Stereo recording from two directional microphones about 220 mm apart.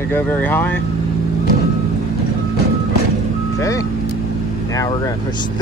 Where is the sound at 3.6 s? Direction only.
15° left (ahead or behind).